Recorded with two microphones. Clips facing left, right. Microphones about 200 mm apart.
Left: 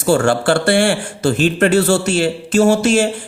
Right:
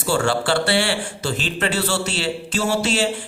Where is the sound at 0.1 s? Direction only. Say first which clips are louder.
Left 6 dB; 50° left (ahead or behind).